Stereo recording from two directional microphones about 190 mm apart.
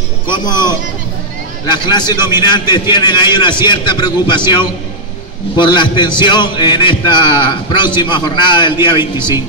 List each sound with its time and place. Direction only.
0.3 s a man's voice: 20° left (ahead or behind)